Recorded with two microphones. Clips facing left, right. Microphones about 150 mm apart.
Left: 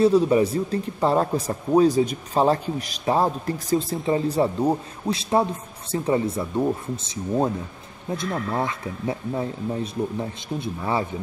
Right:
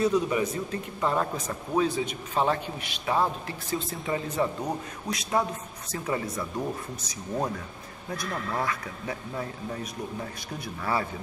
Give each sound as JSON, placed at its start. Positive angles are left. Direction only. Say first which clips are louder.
{"t": 0.0, "sound": "speech", "louder": "left 7 dB", "side_deg": 30}
{"t": 3.9, "sound": "a man's voice", "louder": "left 8 dB", "side_deg": 30}
{"t": 10.6, "sound": "a man's voice", "louder": "left 3 dB", "side_deg": 25}